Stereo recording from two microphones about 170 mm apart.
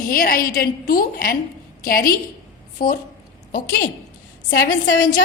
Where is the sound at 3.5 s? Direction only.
80° left.